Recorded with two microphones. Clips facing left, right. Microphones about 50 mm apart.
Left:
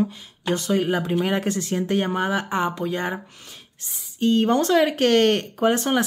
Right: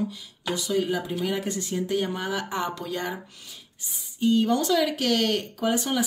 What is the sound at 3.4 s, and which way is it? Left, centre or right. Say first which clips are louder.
Speech: left 2 dB; left.